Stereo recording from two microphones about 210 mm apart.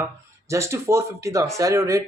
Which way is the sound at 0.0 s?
15° right (ahead or behind).